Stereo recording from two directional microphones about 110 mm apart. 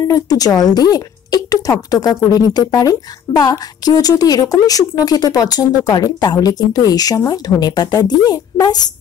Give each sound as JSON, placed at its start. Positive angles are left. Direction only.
{"t": 0.1, "sound": "a woman's voice", "side_deg": 35}